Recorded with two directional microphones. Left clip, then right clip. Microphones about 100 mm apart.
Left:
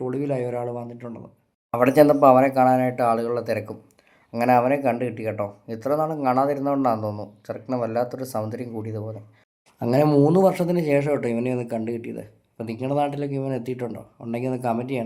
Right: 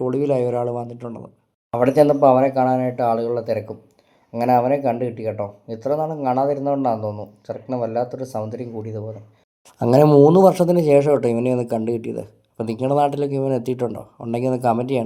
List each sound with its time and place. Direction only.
0.0 s speech: 45° right (ahead or behind)
1.7 s speech: 5° right (ahead or behind)
10.1 s speech: 35° right (ahead or behind)